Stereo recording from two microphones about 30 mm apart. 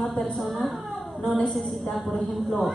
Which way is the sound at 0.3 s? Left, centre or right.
Centre.